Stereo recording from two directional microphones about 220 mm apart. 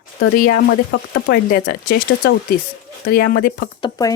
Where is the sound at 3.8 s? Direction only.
20° left (ahead or behind).